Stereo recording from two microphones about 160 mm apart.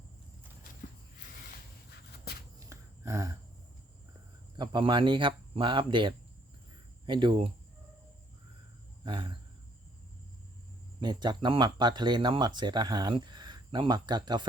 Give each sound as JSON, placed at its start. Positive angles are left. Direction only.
{"t": 2.6, "sound": "a sound", "side_deg": -20}
{"t": 4.5, "sound": "speech", "side_deg": -25}
{"t": 9.0, "sound": "speech", "side_deg": -30}
{"t": 11.0, "sound": "speech", "side_deg": -25}